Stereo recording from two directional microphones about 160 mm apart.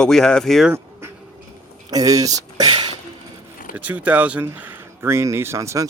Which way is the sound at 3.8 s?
10° right (ahead or behind).